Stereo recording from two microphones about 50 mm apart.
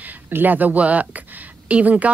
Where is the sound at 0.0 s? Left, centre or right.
Right.